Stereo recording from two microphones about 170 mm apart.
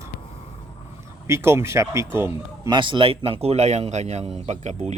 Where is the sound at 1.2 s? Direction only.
15° right (ahead or behind).